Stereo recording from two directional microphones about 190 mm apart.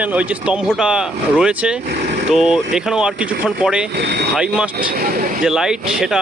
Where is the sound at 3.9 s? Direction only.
60° right (ahead or behind).